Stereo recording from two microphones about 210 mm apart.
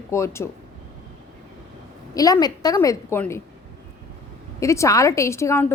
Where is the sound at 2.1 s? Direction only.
15° left (ahead or behind).